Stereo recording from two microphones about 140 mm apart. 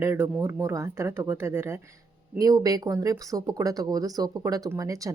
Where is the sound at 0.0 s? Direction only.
15° right (ahead or behind).